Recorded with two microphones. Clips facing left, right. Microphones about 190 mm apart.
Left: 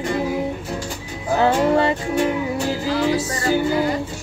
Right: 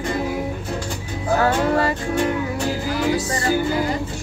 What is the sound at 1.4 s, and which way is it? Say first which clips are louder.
Music: left 4 dB; 20° left (ahead or behind).